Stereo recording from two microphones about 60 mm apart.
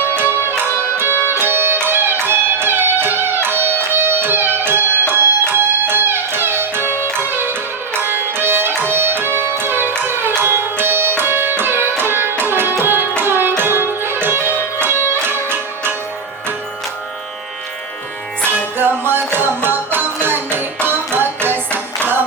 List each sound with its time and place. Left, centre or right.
0.1 s music: right
1.1 s music: left
1.4 s music: right
7.9 s music: right
18.4 s music: right